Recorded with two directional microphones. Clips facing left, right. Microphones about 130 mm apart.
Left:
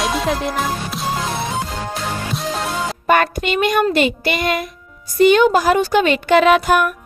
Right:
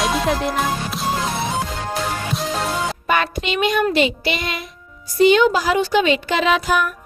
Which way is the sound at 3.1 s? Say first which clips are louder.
Left 5 dB; 50° left (ahead or behind).